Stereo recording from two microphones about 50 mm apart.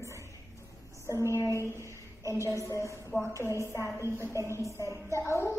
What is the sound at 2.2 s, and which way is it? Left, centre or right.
Speech, right.